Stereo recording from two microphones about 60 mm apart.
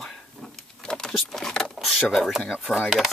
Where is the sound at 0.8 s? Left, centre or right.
Centre.